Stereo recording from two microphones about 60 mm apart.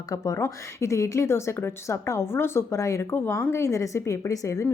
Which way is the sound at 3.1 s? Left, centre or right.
Left.